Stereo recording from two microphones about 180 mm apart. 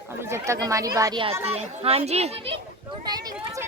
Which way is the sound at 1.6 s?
35° right (ahead or behind).